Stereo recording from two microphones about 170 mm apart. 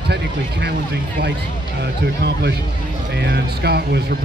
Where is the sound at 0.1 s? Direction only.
75° right (ahead or behind).